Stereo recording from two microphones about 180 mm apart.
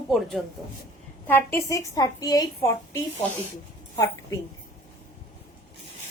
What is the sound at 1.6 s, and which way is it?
A woman's voice, 20° left (ahead or behind).